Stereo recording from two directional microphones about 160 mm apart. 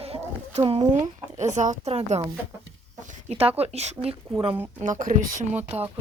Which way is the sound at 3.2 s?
40° right (ahead or behind).